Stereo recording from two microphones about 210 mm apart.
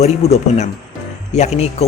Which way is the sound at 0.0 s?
30° left (ahead or behind).